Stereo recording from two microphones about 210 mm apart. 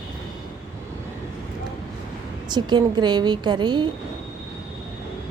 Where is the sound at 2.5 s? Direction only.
20° right (ahead or behind).